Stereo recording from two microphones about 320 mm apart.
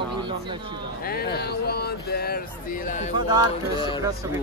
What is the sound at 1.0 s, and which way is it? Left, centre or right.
Speech, left.